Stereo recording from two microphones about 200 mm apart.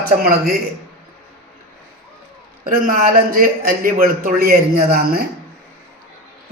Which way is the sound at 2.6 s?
45° right (ahead or behind).